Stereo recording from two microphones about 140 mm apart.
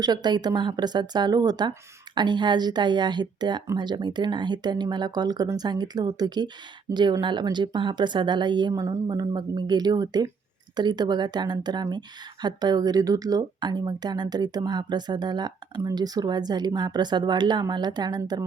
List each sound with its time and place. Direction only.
0.0 s a woman's voice: 30° right (ahead or behind)